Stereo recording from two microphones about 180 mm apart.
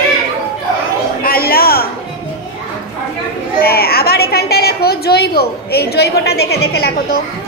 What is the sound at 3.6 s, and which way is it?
A woman's voice, 60° left (ahead or behind).